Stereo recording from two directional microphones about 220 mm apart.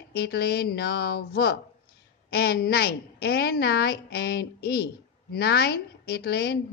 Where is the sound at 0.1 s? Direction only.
45° left (ahead or behind).